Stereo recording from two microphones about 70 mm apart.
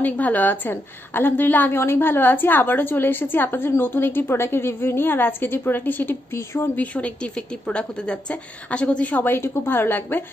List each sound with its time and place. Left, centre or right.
0.0 s a woman's voice: left
6.8 s a woman's voice: centre